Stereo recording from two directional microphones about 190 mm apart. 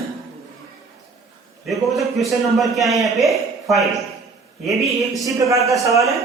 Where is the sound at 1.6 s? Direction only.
Centre (ahead or behind).